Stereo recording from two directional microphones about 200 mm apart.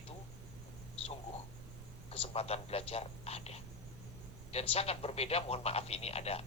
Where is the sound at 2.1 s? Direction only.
30° left (ahead or behind).